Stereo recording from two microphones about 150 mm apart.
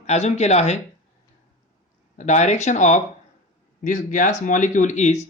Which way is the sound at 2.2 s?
50° left (ahead or behind).